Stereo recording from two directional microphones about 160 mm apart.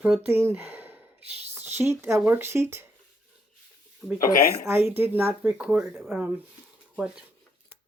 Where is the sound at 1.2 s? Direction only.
40° right (ahead or behind).